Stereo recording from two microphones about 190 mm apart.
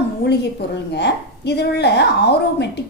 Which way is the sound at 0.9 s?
65° left (ahead or behind).